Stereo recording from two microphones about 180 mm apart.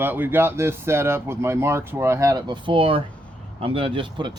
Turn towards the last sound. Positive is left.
turn(degrees=-25)  # may be behind; listen again after turning